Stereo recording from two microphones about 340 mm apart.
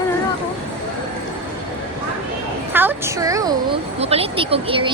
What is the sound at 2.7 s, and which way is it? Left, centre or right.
A woman's voice, centre.